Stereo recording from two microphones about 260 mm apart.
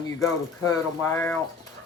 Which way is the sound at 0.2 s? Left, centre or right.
Centre.